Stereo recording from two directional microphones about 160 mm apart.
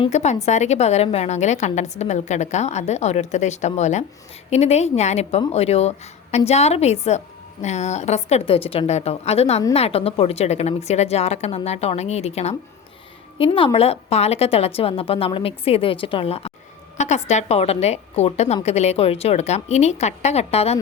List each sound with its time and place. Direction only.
0.1 s a woman's voice: 45° left (ahead or behind)